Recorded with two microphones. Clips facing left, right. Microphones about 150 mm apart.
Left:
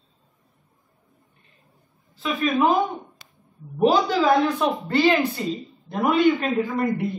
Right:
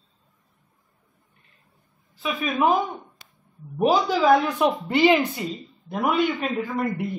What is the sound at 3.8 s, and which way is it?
Speech, 5° right (ahead or behind).